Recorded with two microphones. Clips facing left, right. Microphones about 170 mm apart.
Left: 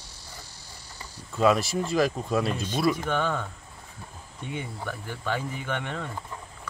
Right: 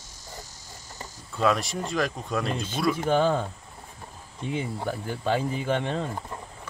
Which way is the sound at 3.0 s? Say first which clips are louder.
Right 5 dB; 30° right (ahead or behind).